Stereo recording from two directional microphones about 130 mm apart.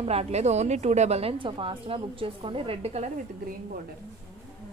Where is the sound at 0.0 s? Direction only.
50° right (ahead or behind).